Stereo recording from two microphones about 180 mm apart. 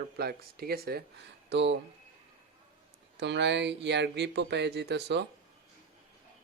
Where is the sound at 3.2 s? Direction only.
80° right.